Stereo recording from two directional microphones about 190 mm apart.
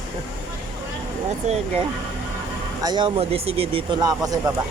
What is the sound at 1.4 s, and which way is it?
Speech, 35° right (ahead or behind).